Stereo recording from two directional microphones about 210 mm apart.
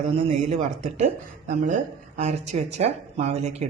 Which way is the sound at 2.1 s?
35° right (ahead or behind).